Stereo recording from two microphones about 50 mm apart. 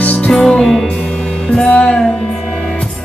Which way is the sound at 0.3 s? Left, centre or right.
Centre.